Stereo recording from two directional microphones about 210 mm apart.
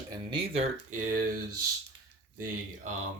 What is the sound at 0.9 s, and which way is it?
Speech, 40° right (ahead or behind).